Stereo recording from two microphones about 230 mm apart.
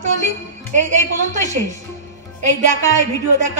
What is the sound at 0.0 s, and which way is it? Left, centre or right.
A woman's voice, right.